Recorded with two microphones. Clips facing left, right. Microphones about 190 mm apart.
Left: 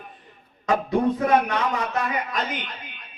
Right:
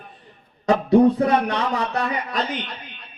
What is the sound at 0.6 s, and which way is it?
Speech, 35° right (ahead or behind).